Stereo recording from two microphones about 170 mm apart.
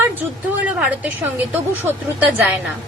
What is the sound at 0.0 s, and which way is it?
A woman's voice, 10° right (ahead or behind).